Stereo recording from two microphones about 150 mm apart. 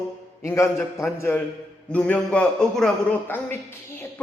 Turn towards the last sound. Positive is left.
turn(degrees=15)  # may be behind; listen again after turning